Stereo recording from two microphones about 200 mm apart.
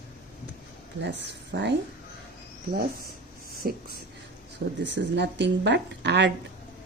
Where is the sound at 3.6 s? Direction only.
45° right (ahead or behind).